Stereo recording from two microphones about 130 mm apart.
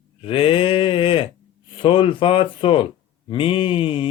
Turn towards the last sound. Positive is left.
turn(degrees=45)  # may be behind; listen again after turning